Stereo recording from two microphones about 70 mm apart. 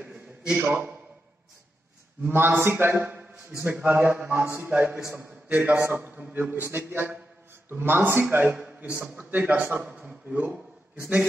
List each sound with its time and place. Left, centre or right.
0.7 s a man's voice: right
2.2 s a man's voice: right
5.0 s a man's voice: right
5.3 s a man's voice: right
8.5 s a sound: centre
9.4 s a man's voice: right